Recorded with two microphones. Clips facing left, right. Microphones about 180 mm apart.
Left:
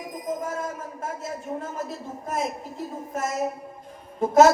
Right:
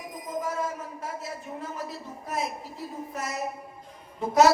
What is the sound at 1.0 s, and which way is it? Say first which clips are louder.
A woman's voice: left 6 dB; 45° left (ahead or behind).